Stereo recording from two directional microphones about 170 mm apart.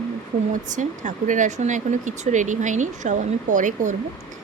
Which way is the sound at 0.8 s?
50° right (ahead or behind).